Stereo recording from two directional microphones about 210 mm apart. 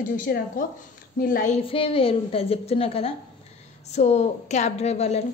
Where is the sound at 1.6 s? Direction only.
25° left (ahead or behind).